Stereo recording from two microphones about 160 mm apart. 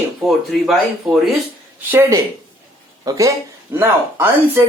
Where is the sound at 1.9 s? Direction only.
15° right (ahead or behind).